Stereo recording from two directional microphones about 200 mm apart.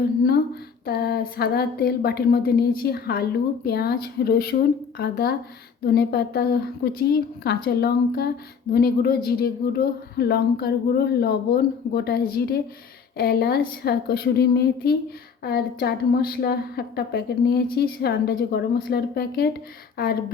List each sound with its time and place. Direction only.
0.9 s a woman's voice: 50° left (ahead or behind)